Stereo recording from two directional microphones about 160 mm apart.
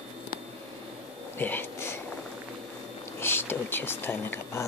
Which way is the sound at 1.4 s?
10° left (ahead or behind).